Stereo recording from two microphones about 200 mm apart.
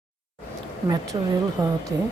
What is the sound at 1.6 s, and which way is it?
Speech, 15° right (ahead or behind).